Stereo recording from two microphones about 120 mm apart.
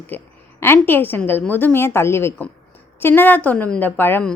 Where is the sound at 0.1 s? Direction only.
15° left (ahead or behind).